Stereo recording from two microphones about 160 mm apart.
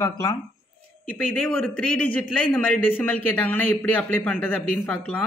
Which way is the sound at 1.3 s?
5° left (ahead or behind).